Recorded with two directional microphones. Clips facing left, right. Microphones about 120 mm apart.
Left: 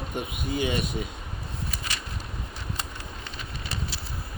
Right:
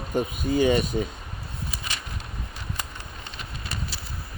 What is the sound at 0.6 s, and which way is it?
Speech, 35° right (ahead or behind).